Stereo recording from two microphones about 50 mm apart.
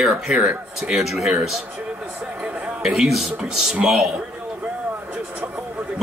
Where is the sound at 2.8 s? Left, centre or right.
Centre.